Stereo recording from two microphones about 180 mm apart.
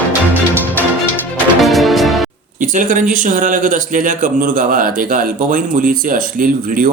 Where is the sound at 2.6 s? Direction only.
45° right (ahead or behind).